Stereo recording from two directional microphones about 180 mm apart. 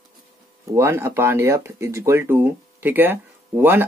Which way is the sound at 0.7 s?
15° right (ahead or behind).